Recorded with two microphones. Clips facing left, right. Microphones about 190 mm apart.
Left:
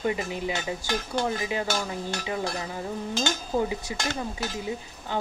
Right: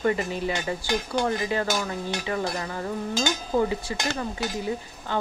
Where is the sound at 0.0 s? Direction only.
15° left (ahead or behind).